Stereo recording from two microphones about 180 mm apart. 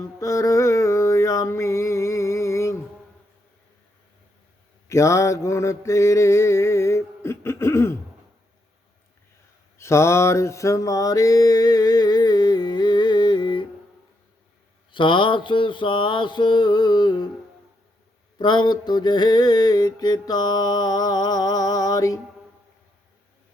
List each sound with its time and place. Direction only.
0.2 s music: 20° left (ahead or behind)
4.9 s mantra: 15° left (ahead or behind)
9.7 s mantra: 15° left (ahead or behind)
14.9 s mantra: 25° left (ahead or behind)
18.3 s mantra: 25° left (ahead or behind)